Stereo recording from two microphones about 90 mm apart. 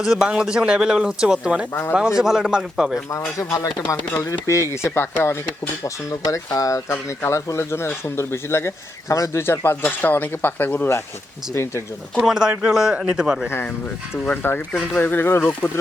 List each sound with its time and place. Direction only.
0.0 s speech: 5° right (ahead or behind)
3.1 s speech: 35° left (ahead or behind)
3.8 s speech: 25° left (ahead or behind)
4.3 s speech: 35° left (ahead or behind)
6.8 s speech: 25° left (ahead or behind)
12.1 s speech: 5° right (ahead or behind)
13.5 s speech: 20° left (ahead or behind)